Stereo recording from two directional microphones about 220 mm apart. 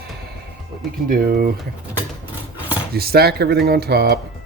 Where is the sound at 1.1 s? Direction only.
40° right (ahead or behind).